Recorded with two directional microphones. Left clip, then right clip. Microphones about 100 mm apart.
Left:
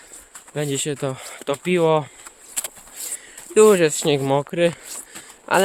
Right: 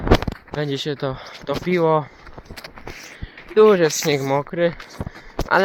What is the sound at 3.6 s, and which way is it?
Speech, 20° left (ahead or behind).